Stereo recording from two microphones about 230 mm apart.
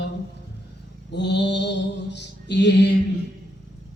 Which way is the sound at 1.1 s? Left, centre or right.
Left.